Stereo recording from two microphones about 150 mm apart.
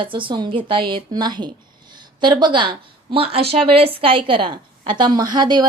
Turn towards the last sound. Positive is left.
turn(degrees=-30)  # may be behind; listen again after turning